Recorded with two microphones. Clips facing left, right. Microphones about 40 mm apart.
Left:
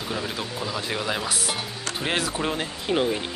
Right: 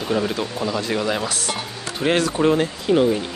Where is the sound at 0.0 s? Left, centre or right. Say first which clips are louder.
Right 8 dB; centre.